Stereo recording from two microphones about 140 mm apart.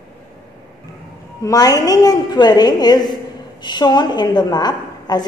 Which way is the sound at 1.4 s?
25° left (ahead or behind).